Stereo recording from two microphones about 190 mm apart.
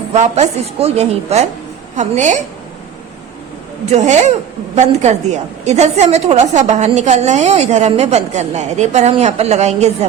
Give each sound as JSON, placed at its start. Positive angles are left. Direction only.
{"t": 0.1, "sound": "a woman's voice", "side_deg": -35}
{"t": 3.9, "sound": "a woman's voice", "side_deg": -40}